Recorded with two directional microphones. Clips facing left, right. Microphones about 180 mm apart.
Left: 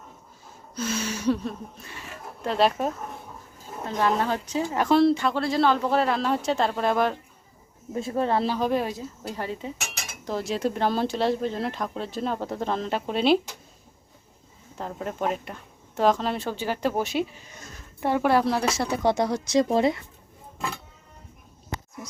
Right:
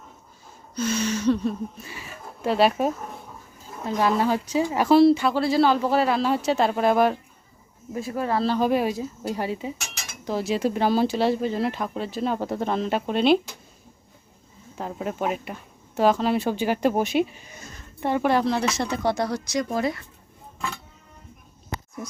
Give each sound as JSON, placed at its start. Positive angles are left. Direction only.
{"t": 0.8, "sound": "speech", "side_deg": 5}
{"t": 7.9, "sound": "speech", "side_deg": 25}
{"t": 8.5, "sound": "speech", "side_deg": -5}
{"t": 14.8, "sound": "speech", "side_deg": -5}
{"t": 17.6, "sound": "a woman's voice", "side_deg": 0}